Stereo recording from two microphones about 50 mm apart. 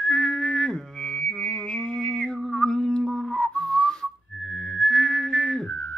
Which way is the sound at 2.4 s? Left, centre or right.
Centre.